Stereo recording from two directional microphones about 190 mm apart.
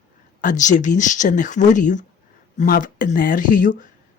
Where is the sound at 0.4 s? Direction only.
40° left (ahead or behind).